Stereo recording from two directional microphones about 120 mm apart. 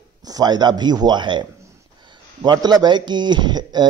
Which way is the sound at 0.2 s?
35° right (ahead or behind).